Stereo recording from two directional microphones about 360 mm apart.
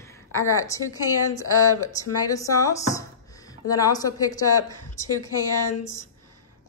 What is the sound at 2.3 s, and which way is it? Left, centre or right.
Speech, centre.